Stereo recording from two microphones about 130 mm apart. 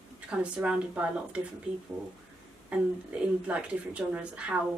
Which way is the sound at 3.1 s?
10° right (ahead or behind).